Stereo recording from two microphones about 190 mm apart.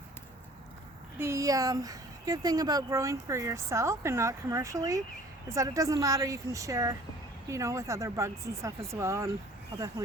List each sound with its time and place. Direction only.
1.2 s speech: 15° right (ahead or behind)